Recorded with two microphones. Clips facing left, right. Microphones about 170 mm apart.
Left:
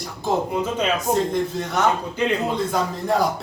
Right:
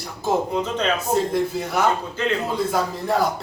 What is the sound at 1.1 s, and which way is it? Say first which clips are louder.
Speech: even; 5° right (ahead or behind).